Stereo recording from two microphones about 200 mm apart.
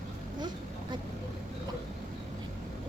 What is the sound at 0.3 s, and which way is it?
Vehicle, 20° right (ahead or behind).